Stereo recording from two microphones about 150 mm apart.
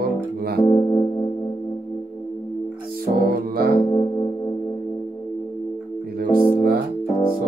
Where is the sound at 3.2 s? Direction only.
85° right.